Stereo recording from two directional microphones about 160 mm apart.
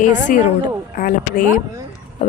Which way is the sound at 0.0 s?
55° left (ahead or behind).